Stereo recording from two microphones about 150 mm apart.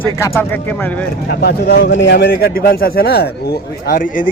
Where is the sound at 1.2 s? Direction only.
90° left.